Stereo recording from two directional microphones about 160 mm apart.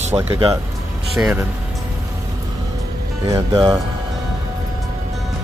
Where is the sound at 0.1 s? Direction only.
25° right (ahead or behind).